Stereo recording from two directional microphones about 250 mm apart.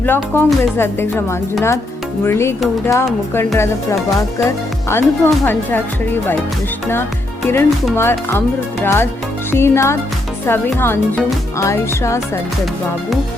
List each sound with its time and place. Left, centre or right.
0.0 s speech: centre
7.4 s speech: centre